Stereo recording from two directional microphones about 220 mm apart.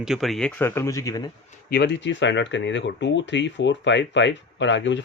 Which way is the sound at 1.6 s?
50° left (ahead or behind).